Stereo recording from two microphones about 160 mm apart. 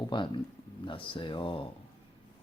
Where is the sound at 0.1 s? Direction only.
30° left (ahead or behind).